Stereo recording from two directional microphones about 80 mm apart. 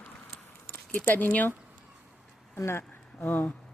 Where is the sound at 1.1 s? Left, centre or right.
Left.